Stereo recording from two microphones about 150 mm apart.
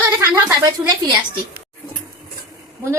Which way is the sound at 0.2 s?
20° right (ahead or behind).